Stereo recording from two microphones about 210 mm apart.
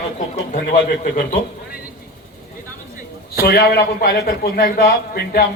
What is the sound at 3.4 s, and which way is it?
A man's voice, 45° left (ahead or behind).